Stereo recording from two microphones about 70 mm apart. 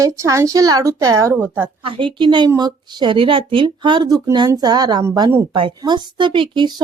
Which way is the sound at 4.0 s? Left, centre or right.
Right.